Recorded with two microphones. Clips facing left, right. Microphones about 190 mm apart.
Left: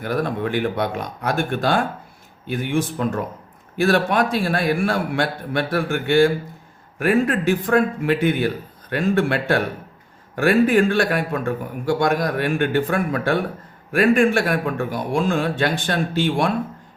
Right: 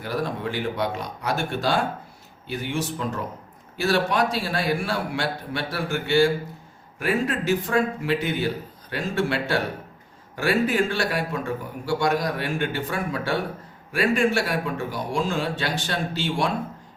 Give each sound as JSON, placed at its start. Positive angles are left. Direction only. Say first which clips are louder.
{"t": 0.0, "sound": "a man's voice", "louder": "left 5 dB", "side_deg": 55}